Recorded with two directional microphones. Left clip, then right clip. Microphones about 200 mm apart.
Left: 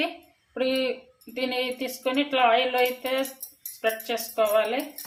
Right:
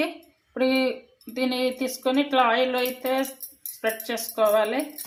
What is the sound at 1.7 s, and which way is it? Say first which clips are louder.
Speech: right 2 dB; 25° right (ahead or behind).